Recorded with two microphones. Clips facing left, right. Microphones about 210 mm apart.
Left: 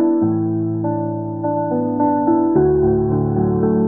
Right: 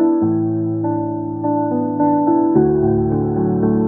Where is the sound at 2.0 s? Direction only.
Centre (ahead or behind).